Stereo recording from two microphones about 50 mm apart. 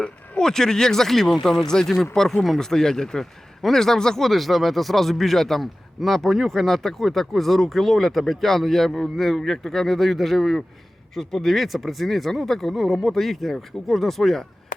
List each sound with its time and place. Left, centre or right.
0.0 s speech: centre